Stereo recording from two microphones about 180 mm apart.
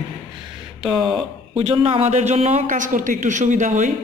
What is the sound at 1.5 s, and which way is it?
A man's voice, 35° right (ahead or behind).